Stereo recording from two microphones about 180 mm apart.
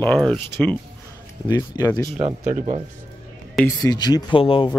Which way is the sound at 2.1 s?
40° right (ahead or behind).